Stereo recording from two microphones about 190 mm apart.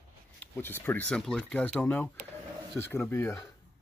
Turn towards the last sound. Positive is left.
turn(degrees=15)  # may be behind; listen again after turning